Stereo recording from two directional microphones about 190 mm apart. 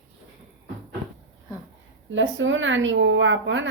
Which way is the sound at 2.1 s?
85° right.